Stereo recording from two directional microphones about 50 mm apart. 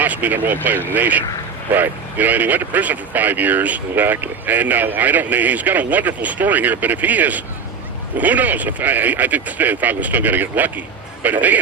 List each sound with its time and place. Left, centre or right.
0.0 s speech: right